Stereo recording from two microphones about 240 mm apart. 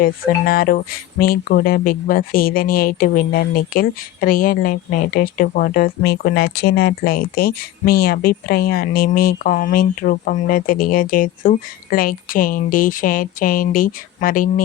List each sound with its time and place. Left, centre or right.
0.0 s speech: left